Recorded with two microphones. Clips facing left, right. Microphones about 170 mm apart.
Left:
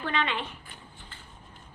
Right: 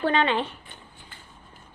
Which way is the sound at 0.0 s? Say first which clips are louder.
Right 7 dB; 35° right (ahead or behind).